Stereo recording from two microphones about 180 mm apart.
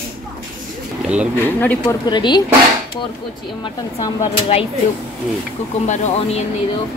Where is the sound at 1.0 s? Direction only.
5° right (ahead or behind).